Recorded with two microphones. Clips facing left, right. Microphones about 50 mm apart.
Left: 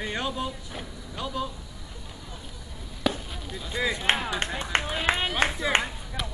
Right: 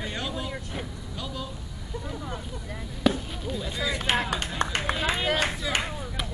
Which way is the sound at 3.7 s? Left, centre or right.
Left.